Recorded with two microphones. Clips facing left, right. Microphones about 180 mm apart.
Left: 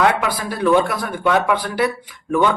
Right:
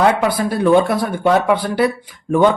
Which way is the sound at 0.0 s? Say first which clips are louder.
Right 3 dB; 30° right (ahead or behind).